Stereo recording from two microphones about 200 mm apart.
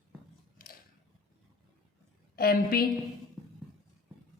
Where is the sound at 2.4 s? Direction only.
50° left (ahead or behind).